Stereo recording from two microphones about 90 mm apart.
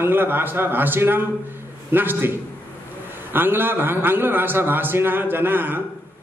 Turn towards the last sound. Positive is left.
turn(degrees=-25)  # may be behind; listen again after turning